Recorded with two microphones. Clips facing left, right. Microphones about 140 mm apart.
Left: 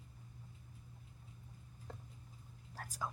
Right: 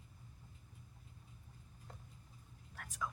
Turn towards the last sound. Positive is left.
turn(degrees=35)  # may be behind; listen again after turning